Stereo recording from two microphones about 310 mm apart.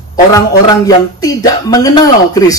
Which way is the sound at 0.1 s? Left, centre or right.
Centre.